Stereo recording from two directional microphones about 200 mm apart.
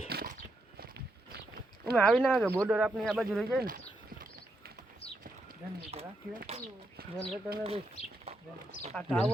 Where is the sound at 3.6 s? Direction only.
45° right (ahead or behind).